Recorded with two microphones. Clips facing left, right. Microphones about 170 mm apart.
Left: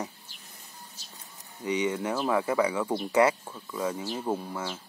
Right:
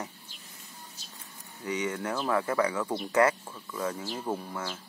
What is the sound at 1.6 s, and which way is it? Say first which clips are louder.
Speech: left 3 dB; 15° left (ahead or behind).